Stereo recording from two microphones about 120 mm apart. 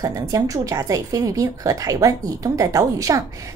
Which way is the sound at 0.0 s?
30° right (ahead or behind).